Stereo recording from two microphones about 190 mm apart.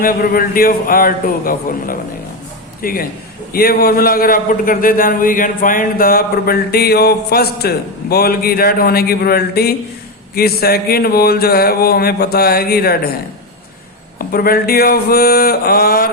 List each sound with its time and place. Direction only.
0.0 s a man's voice: 50° left (ahead or behind)
14.2 s a man's voice: 50° left (ahead or behind)